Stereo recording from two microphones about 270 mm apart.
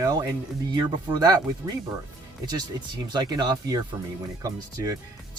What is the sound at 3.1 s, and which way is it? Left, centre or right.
Speech, centre.